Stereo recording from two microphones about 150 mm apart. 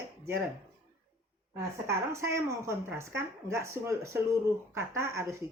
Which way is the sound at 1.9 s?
20° right (ahead or behind).